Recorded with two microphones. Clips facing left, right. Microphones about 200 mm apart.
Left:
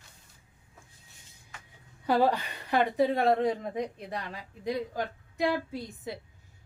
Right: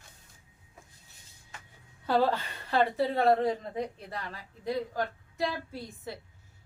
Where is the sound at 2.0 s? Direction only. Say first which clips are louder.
Left 1 dB; 15° left (ahead or behind).